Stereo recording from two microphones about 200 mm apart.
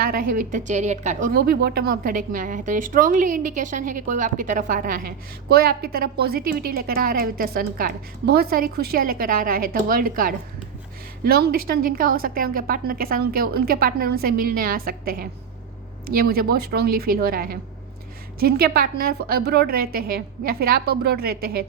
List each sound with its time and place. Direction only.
0.0 s a woman's voice: 45° right (ahead or behind)